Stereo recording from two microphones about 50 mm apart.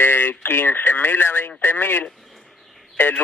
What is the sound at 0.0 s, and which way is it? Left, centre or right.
Speech, left.